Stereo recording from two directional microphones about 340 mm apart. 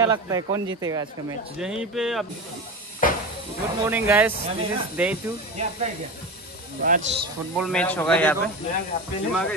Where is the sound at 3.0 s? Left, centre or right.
Left.